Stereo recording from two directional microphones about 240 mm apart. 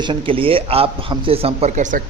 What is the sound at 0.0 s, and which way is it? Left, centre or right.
A man's voice, right.